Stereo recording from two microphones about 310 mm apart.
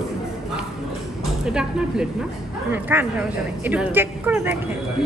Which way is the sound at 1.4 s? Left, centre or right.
Centre.